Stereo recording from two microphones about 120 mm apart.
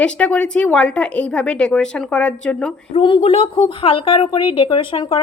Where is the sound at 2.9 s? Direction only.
45° left (ahead or behind).